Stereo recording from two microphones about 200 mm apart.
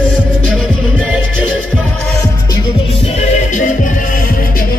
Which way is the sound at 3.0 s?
35° left (ahead or behind).